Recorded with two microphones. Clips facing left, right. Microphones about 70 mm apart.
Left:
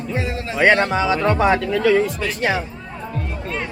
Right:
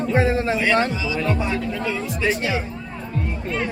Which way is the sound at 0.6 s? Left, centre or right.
Left.